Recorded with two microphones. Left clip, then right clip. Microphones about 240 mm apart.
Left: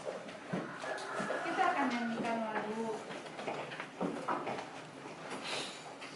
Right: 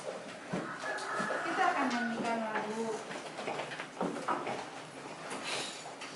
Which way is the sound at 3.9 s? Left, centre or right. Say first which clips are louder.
Right 2 dB; centre.